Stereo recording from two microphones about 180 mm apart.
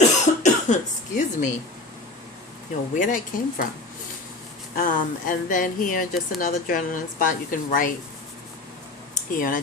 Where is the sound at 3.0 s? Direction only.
45° left (ahead or behind).